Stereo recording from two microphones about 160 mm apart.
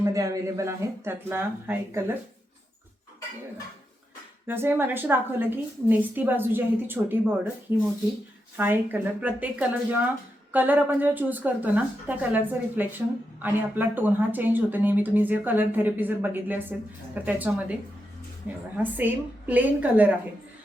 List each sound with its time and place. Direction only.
0.0 s speech: 20° right (ahead or behind)
4.4 s speech: 15° right (ahead or behind)
8.5 s speech: 10° right (ahead or behind)